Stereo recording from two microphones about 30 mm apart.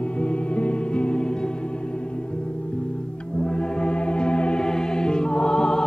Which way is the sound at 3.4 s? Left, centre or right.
Left.